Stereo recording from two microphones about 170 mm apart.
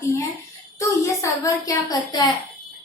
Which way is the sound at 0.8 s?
20° left (ahead or behind).